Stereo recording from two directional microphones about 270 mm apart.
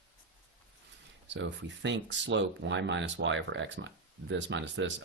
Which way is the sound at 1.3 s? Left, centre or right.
Right.